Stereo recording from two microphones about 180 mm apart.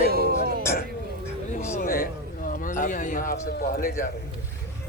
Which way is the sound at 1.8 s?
55° left (ahead or behind).